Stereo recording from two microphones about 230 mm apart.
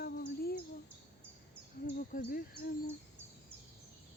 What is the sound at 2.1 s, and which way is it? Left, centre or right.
Female singing, left.